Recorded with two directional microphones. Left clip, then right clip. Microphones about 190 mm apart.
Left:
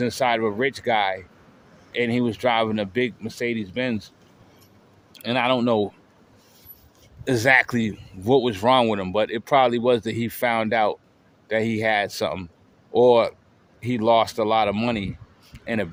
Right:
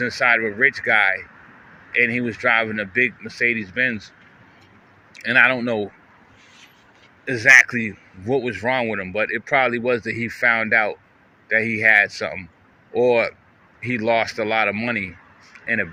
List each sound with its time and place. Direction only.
0.0 s speech: 15° left (ahead or behind)
5.2 s speech: 15° left (ahead or behind)
7.3 s speech: 25° left (ahead or behind)